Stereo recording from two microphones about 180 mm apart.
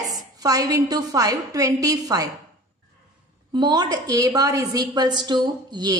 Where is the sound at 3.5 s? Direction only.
25° right (ahead or behind).